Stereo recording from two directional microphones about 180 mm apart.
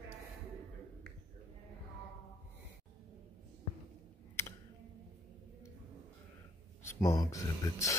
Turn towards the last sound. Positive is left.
turn(degrees=20)  # may be behind; listen again after turning